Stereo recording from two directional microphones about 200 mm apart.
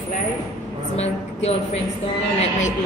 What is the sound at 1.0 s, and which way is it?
Speech, 30° left (ahead or behind).